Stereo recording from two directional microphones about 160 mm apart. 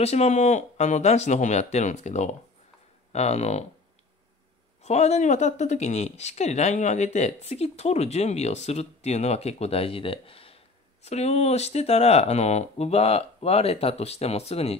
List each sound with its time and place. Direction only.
0.0 s speech: 40° left (ahead or behind)
4.8 s speech: 45° left (ahead or behind)